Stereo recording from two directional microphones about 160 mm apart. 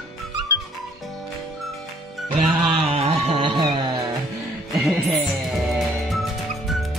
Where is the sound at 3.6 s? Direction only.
30° right (ahead or behind).